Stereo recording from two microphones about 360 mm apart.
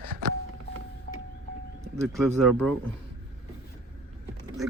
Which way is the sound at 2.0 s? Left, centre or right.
Centre.